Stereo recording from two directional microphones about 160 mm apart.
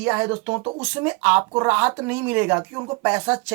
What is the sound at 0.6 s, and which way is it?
Speech, 30° right (ahead or behind).